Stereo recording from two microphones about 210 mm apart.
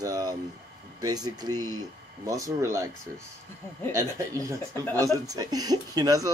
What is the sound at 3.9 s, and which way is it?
Speech, 15° right (ahead or behind).